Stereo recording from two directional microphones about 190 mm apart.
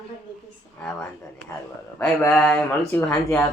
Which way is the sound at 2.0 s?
5° left (ahead or behind).